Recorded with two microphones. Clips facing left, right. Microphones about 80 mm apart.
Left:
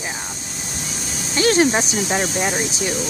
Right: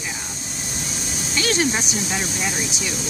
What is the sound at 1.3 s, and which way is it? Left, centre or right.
Speech, left.